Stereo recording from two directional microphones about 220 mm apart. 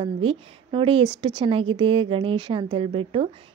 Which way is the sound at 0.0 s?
25° right (ahead or behind).